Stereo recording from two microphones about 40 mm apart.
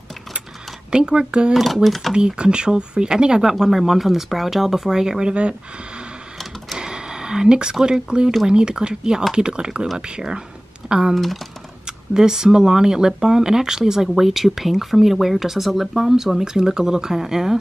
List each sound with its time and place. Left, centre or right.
0.9 s speech: right
1.5 s speech: centre
2.1 s speech: right
5.3 s speech: right
6.8 s a sound: centre
7.8 s speech: right